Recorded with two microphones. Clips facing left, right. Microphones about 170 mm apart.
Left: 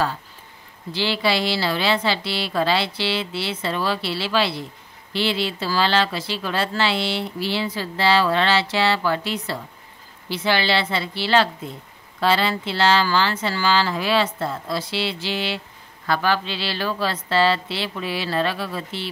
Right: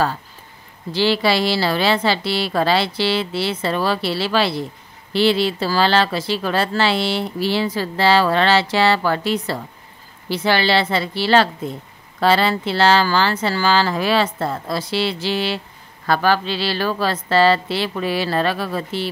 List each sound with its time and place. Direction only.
0.9 s a woman's voice: 40° right (ahead or behind)